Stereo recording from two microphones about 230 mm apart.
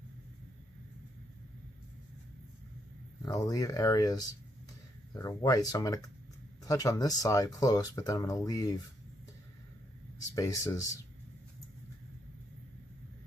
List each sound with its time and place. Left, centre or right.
3.2 s speech: centre
10.3 s speech: centre